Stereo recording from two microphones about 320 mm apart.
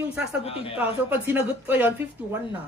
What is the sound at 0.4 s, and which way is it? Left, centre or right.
Speech, centre.